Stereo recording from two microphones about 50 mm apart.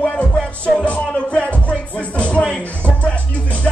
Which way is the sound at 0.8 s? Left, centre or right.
Left.